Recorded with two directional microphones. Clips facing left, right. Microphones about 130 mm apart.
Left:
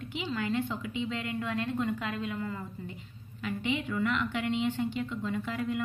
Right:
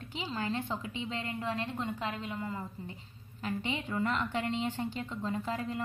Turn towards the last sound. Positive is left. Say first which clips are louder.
# left 1 dB
turn(degrees=-35)  # may be behind; listen again after turning